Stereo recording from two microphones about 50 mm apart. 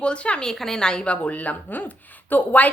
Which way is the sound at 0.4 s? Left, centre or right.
Centre.